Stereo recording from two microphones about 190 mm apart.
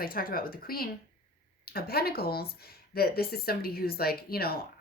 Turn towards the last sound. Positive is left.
turn(degrees=55)  # may be behind; listen again after turning